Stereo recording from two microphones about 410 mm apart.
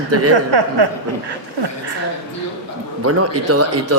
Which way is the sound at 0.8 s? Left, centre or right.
Right.